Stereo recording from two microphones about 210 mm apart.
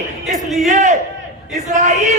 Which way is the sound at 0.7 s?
35° right (ahead or behind).